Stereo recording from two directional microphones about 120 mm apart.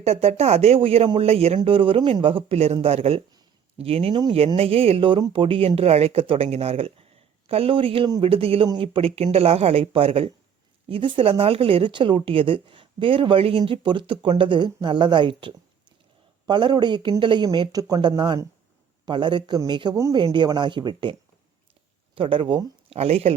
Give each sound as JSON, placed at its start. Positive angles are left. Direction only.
{"t": 0.0, "sound": "speech", "side_deg": -60}
{"t": 23.0, "sound": "speech", "side_deg": -60}